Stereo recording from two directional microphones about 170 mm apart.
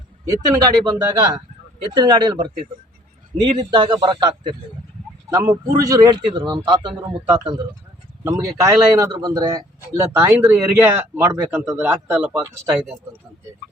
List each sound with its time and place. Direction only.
0.3 s a man's voice: 20° right (ahead or behind)